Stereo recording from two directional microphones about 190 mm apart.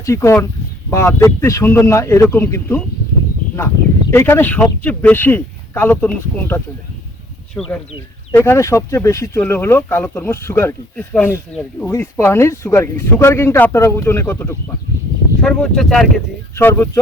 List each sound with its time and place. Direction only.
0.0 s speech: 15° left (ahead or behind)
4.1 s speech: 10° left (ahead or behind)
16.6 s speech: 10° left (ahead or behind)